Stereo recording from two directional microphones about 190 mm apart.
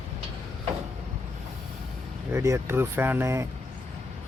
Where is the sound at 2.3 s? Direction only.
15° right (ahead or behind).